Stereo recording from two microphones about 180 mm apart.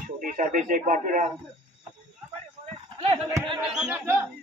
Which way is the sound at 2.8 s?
30° right (ahead or behind).